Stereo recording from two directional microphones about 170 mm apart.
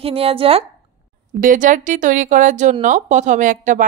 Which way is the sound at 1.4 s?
50° right (ahead or behind).